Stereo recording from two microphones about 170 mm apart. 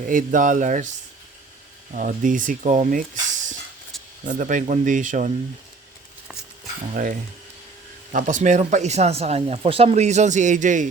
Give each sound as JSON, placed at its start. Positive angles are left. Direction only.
{"t": 0.0, "sound": "speech", "side_deg": -50}
{"t": 4.3, "sound": "speech", "side_deg": -50}
{"t": 6.9, "sound": "speech", "side_deg": -50}